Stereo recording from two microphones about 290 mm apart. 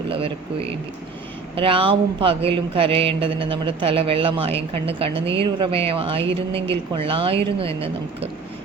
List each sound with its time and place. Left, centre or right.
0.1 s speech: centre